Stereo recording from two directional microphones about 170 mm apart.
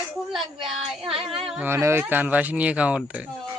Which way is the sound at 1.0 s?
30° right (ahead or behind).